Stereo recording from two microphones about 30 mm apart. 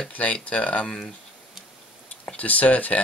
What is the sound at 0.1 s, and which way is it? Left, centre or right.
Speech, left.